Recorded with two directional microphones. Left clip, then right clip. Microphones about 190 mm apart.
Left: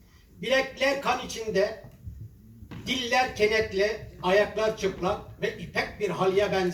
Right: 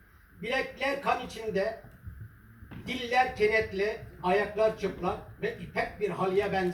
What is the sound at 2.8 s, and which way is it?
A man's voice, 50° left (ahead or behind).